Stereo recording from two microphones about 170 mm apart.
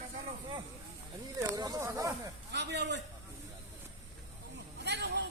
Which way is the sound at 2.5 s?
90° right.